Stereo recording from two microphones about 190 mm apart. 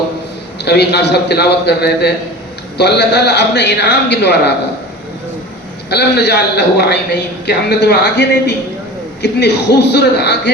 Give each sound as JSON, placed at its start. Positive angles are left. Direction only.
{"t": 0.6, "sound": "a man's voice", "side_deg": 60}
{"t": 5.9, "sound": "a man's voice", "side_deg": 60}